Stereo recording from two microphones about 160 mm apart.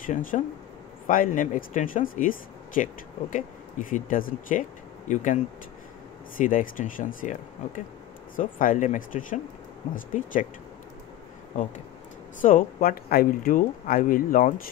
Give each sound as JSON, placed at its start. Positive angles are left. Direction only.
{"t": 0.0, "sound": "speech", "side_deg": 55}
{"t": 12.4, "sound": "speech", "side_deg": 55}